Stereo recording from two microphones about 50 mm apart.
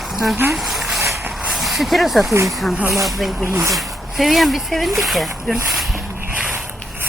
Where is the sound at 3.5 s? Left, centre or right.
Right.